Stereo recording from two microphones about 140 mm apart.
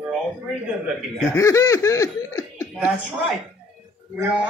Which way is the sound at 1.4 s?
20° left (ahead or behind).